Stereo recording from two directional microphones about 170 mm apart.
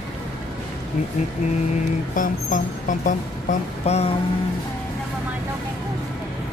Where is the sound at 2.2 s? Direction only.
50° left (ahead or behind).